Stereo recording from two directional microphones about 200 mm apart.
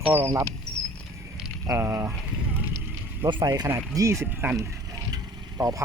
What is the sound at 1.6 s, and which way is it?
Speech, 15° right (ahead or behind).